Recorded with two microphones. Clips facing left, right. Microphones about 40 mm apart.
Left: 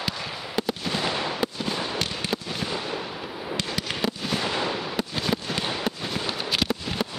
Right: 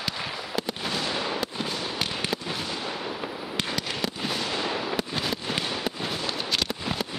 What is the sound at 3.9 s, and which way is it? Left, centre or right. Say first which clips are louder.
Fireworks: left 2 dB; left.